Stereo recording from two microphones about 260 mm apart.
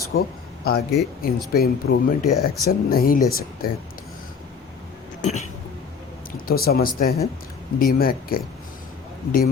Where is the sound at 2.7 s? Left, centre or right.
Left.